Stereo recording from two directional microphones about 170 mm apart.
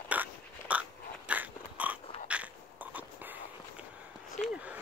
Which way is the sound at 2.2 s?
5° right (ahead or behind).